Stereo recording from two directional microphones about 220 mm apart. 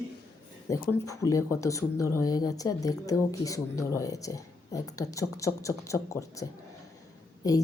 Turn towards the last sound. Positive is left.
turn(degrees=15)  # may be behind; listen again after turning